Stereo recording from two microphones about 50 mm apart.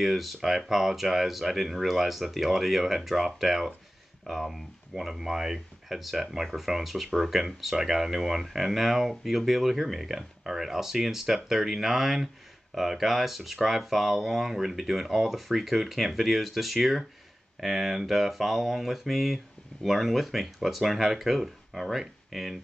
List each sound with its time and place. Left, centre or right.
0.0 s speech: centre